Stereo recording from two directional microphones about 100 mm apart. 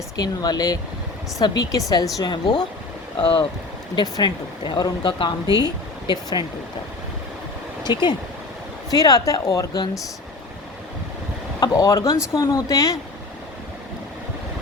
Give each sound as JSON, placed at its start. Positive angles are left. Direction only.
{"t": 0.2, "sound": "speech", "side_deg": 40}
{"t": 3.2, "sound": "speech", "side_deg": 60}
{"t": 3.9, "sound": "speech", "side_deg": 50}
{"t": 7.9, "sound": "speech", "side_deg": 45}
{"t": 11.6, "sound": "speech", "side_deg": 35}